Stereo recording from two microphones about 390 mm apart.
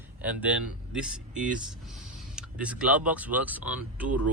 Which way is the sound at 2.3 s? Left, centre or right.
Centre.